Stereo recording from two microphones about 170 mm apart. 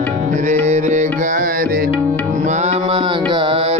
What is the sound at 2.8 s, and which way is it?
Music, 30° right (ahead or behind).